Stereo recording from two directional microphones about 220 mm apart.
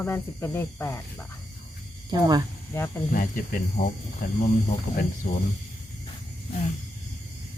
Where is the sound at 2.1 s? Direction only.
20° right (ahead or behind).